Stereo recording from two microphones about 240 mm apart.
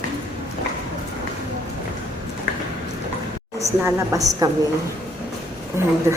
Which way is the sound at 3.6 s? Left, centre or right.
Centre.